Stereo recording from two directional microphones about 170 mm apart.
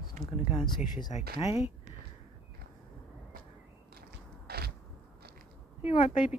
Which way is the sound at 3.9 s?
65° right (ahead or behind).